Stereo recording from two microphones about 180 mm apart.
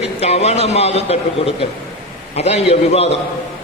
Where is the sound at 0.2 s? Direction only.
35° left (ahead or behind).